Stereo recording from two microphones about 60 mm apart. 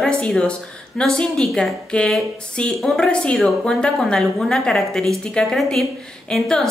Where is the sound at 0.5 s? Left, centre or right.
Centre.